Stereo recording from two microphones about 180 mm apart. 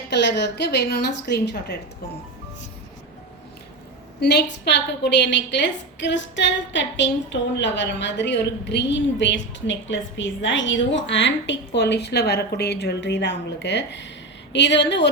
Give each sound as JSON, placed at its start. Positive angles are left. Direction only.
{"t": 0.1, "sound": "a woman's voice", "side_deg": 75}
{"t": 4.2, "sound": "a woman's voice", "side_deg": 65}